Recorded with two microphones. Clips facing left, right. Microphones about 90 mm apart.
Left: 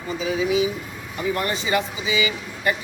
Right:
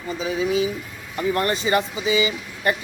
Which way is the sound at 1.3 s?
40° right (ahead or behind).